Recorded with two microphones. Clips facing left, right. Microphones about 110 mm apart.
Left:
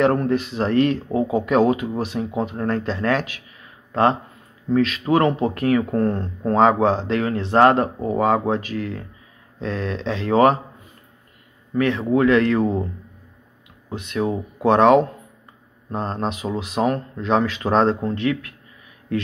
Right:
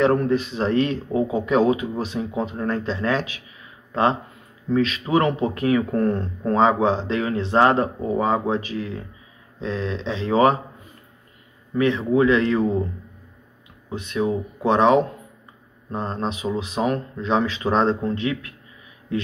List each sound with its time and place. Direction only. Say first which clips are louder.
0.0 s speech: even; 50° left (ahead or behind)
4.6 s speech: left 3 dB; 45° left (ahead or behind)
5.9 s speech: even; 35° left (ahead or behind)
6.6 s speech: left 2 dB; 50° left (ahead or behind)
11.7 s speech: even; 50° left (ahead or behind)
13.9 s speech: even; 50° left (ahead or behind)
15.9 s speech: left 1 dB; 60° left (ahead or behind)